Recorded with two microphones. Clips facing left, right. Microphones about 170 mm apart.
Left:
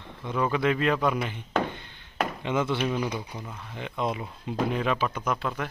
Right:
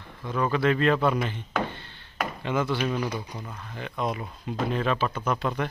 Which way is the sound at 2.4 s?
20° left (ahead or behind).